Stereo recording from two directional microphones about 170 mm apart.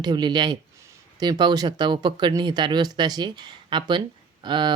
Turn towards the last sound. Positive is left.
turn(degrees=-25)  # may be behind; listen again after turning